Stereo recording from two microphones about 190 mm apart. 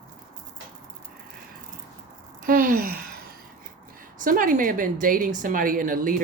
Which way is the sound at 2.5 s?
45° right (ahead or behind).